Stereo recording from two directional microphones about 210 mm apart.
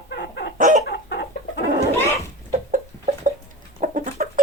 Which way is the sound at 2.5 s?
40° right (ahead or behind).